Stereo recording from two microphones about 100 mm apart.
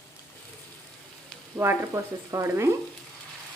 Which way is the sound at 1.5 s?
25° right (ahead or behind).